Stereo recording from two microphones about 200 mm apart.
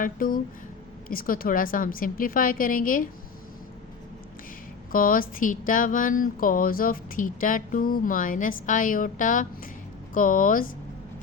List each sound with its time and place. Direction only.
0.0 s a woman's voice: 45° left (ahead or behind)
4.9 s a woman's voice: 45° left (ahead or behind)